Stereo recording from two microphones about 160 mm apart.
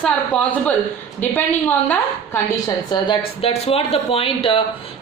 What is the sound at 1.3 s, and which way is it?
A woman's voice, 10° left (ahead or behind).